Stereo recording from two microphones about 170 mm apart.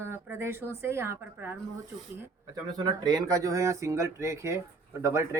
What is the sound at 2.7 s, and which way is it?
Speech, 25° right (ahead or behind).